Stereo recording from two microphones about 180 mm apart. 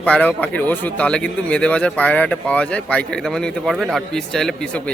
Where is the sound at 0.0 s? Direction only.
10° left (ahead or behind).